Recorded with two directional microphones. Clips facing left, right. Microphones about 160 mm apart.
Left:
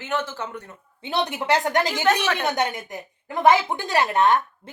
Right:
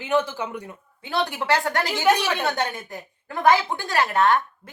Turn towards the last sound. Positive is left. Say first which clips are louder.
# left 1 dB
turn(degrees=20)  # may be behind; listen again after turning